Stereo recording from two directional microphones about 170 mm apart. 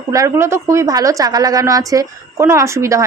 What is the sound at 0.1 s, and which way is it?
A woman's voice, 20° right (ahead or behind).